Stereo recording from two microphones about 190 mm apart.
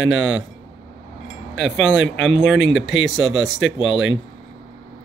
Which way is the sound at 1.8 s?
75° left (ahead or behind).